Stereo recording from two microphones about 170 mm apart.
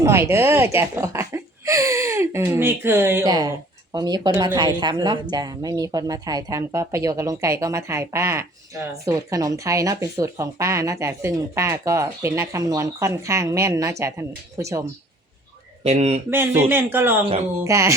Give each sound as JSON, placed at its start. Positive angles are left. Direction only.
{"t": 0.0, "sound": "speech", "side_deg": -15}
{"t": 15.8, "sound": "speech", "side_deg": -40}
{"t": 16.3, "sound": "speech", "side_deg": -10}